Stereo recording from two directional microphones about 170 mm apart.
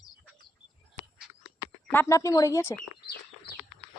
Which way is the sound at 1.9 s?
15° left (ahead or behind).